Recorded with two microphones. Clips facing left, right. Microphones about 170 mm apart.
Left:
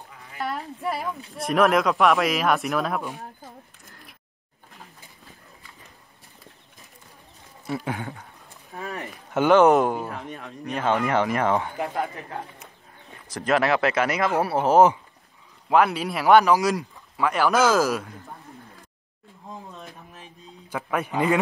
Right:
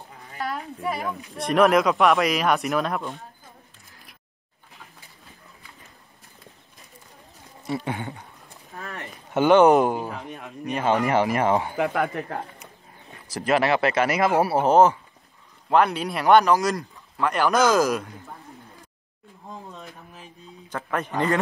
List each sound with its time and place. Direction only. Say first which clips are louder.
0.7 s speech: even; centre (ahead or behind)
3.8 s a sound: left 3 dB; centre (ahead or behind)
7.6 s speech: right 1 dB; centre (ahead or behind)
11.7 s speech: right 4 dB; 70° right (ahead or behind)
13.3 s speech: even; 5° right (ahead or behind)
14.7 s a man's voice: left 2 dB; 10° left (ahead or behind)
20.7 s a man's voice: left 1 dB; 10° left (ahead or behind)